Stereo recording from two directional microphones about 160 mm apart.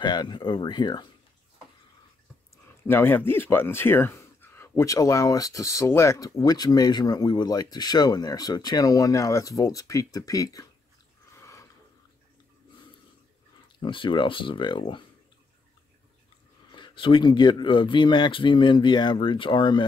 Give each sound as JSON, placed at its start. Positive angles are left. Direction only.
{"t": 0.0, "sound": "speech", "side_deg": 25}
{"t": 2.5, "sound": "speech", "side_deg": 15}
{"t": 11.3, "sound": "a sound", "side_deg": 15}
{"t": 13.7, "sound": "speech", "side_deg": 30}
{"t": 16.7, "sound": "speech", "side_deg": 30}